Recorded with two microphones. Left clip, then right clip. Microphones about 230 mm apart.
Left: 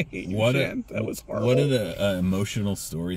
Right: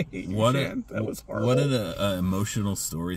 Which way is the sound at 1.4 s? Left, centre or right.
Centre.